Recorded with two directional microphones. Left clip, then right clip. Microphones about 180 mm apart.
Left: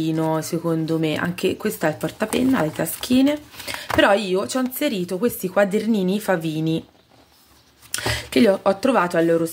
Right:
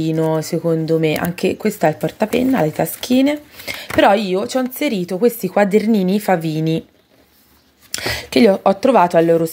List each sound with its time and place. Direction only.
0.0 s speech: 15° right (ahead or behind)
7.9 s speech: 20° right (ahead or behind)